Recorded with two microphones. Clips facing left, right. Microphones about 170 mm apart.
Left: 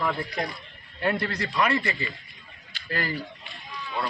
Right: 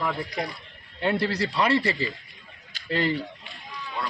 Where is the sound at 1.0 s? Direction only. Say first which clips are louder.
Right 2 dB; 25° right (ahead or behind).